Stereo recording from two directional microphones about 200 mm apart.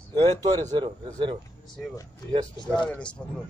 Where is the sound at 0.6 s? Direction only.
25° right (ahead or behind).